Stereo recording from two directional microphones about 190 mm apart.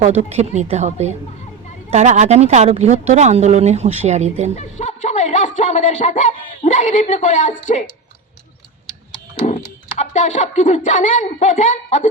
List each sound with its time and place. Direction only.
0.0 s a woman's voice: 35° right (ahead or behind)
4.5 s speech: 35° left (ahead or behind)
5.0 s a sound: 40° left (ahead or behind)
5.5 s speech: 40° left (ahead or behind)
10.0 s speech: 40° left (ahead or behind)